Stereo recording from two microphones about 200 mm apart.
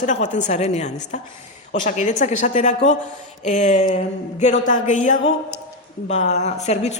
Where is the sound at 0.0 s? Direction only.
40° left (ahead or behind).